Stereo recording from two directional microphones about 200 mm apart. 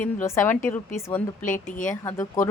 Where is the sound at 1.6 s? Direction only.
40° left (ahead or behind).